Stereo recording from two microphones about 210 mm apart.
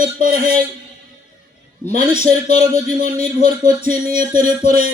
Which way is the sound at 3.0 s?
40° right (ahead or behind).